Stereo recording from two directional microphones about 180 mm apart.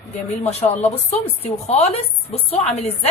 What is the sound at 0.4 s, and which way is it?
A woman's voice, 40° left (ahead or behind).